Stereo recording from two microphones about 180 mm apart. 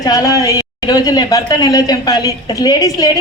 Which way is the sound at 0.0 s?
20° left (ahead or behind).